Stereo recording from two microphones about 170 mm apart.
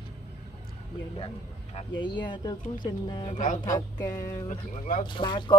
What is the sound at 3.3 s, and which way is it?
Speech, 50° left (ahead or behind).